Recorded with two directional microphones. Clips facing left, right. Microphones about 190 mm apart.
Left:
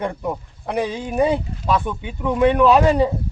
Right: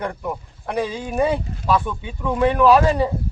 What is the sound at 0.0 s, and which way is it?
Speech, 20° left (ahead or behind).